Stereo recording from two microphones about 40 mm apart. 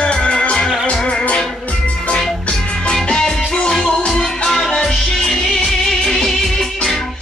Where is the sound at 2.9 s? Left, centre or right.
Centre.